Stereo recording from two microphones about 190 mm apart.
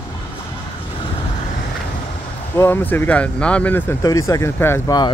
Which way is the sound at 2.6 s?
10° left (ahead or behind).